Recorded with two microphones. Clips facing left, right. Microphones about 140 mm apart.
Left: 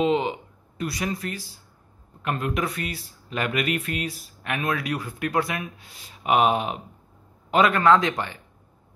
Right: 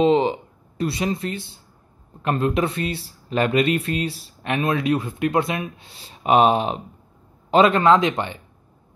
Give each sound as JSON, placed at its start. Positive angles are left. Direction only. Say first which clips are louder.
{"t": 0.0, "sound": "speech", "louder": "right 5 dB", "side_deg": -35}